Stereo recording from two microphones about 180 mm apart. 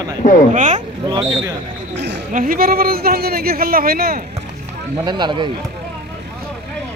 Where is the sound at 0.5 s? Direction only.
45° right (ahead or behind).